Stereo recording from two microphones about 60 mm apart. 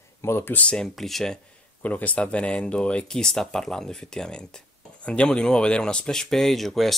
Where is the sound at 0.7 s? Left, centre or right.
Centre.